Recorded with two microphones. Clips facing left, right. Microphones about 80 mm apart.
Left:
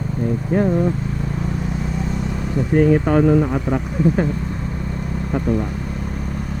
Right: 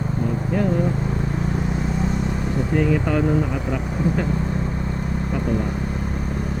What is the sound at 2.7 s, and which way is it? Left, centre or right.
Speech, left.